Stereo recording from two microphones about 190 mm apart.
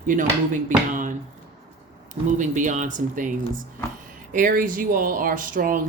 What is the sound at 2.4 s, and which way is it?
Speech, 40° right (ahead or behind).